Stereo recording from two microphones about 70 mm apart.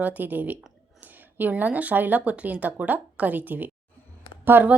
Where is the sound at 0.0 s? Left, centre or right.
Right.